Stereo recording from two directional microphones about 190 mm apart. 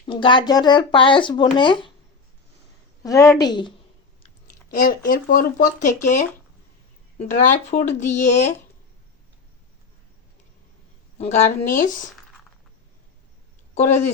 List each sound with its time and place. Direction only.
0.0 s speech: 25° left (ahead or behind)
3.0 s speech: 15° left (ahead or behind)
4.7 s speech: 50° left (ahead or behind)
11.2 s speech: 35° left (ahead or behind)